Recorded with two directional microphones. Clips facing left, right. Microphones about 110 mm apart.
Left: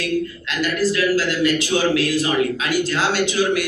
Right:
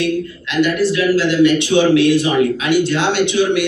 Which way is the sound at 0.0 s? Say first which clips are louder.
Right 4 dB; 40° left (ahead or behind).